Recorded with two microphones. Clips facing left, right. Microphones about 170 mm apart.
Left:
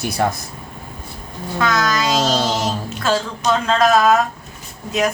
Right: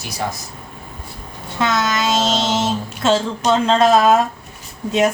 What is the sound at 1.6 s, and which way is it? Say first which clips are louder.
Child singing: even; 25° right (ahead or behind).